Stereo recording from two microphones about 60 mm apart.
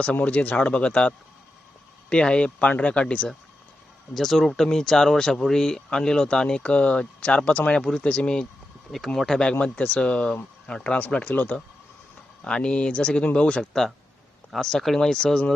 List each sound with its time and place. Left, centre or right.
0.0 s speech: left
4.1 s speech: centre; by 11.6 s left
12.4 s speech: centre